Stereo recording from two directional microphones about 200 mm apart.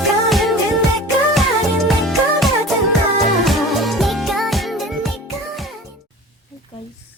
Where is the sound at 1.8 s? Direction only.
Centre (ahead or behind).